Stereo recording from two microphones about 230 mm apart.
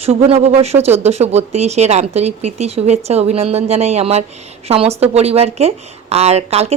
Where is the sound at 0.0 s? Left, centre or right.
Right.